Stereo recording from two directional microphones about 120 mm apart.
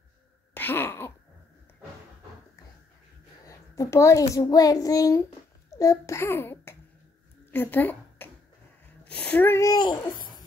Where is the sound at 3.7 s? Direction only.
25° left (ahead or behind).